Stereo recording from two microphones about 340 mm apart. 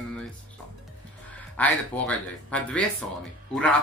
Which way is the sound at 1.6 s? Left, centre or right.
Centre.